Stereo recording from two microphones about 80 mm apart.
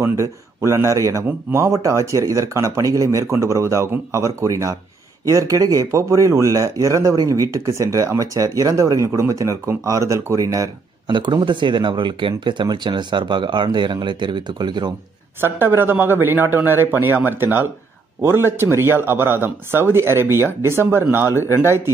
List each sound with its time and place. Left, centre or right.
0.0 s speech: right
11.1 s speech: right
15.4 s a man's voice: right